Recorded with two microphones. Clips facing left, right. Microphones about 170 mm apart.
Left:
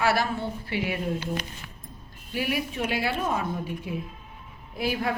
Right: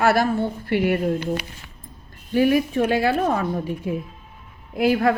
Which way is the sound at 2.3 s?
50° right (ahead or behind).